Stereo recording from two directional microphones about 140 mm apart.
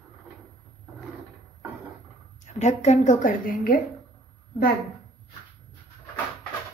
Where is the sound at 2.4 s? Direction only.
55° left (ahead or behind); by 3.7 s 80° left.